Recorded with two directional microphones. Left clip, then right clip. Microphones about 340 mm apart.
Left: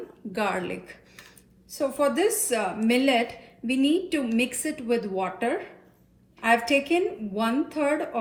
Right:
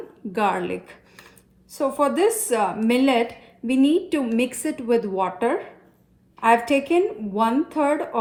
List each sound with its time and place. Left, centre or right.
0.3 s a woman's voice: right